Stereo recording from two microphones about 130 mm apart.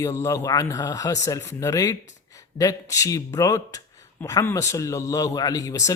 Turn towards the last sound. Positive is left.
turn(degrees=25)  # may be behind; listen again after turning